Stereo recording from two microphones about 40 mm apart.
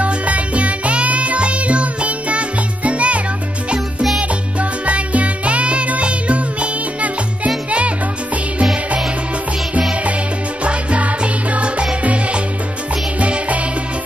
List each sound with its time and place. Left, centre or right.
0.0 s music: right
4.2 s music: right
10.6 s music: right